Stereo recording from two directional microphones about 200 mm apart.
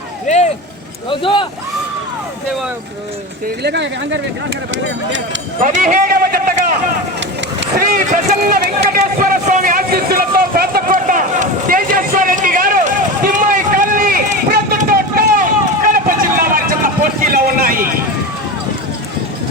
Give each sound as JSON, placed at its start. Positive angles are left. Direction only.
{"t": 1.1, "sound": "speech", "side_deg": 25}
{"t": 3.4, "sound": "speech", "side_deg": -55}
{"t": 5.5, "sound": "a man's voice", "side_deg": -40}
{"t": 7.8, "sound": "speech", "side_deg": -40}
{"t": 9.0, "sound": "a sound", "side_deg": -40}